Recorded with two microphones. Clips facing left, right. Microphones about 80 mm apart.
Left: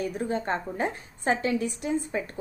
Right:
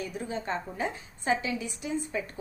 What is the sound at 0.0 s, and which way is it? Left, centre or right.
A woman's voice, left.